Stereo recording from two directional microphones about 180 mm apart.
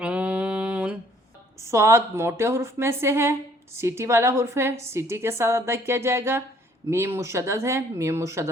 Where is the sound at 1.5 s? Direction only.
15° right (ahead or behind).